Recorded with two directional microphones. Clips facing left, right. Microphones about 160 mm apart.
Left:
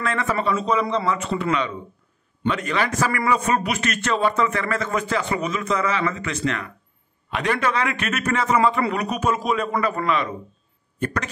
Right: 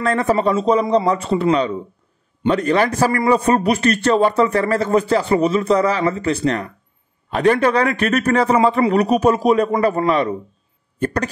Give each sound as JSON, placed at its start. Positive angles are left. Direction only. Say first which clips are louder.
{"t": 0.0, "sound": "speech", "louder": "right 7 dB", "side_deg": -35}